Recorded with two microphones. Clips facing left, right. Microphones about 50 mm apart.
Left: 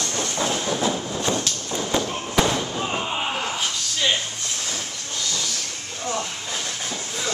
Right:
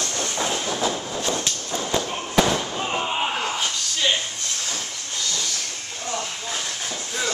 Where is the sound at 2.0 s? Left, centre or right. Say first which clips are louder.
Right 1 dB; centre.